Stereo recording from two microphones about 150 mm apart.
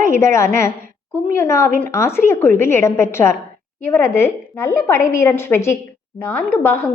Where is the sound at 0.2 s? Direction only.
20° left (ahead or behind).